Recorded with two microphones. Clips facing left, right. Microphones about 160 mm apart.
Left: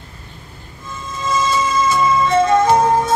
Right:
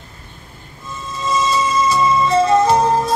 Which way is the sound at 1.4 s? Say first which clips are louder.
Even; 30° right (ahead or behind).